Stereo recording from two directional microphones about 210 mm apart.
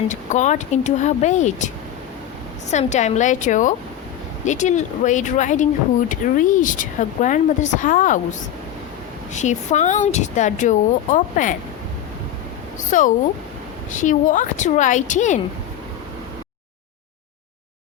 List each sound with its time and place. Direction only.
0.1 s speech: 35° left (ahead or behind)
12.9 s speech: 40° left (ahead or behind)